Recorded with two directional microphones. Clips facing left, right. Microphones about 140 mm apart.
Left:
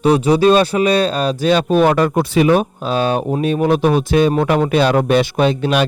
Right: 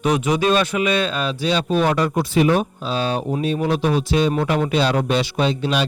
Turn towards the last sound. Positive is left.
turn(degrees=55)  # may be behind; listen again after turning